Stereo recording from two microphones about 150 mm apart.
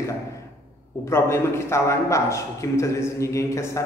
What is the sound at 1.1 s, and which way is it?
A man's voice, 15° left (ahead or behind).